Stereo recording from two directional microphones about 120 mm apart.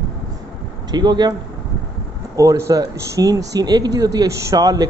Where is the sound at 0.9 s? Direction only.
35° right (ahead or behind).